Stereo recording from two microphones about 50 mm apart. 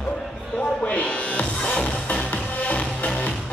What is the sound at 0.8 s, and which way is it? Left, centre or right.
Music, left.